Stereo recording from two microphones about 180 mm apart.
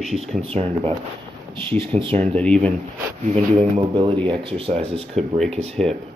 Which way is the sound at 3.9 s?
25° right (ahead or behind).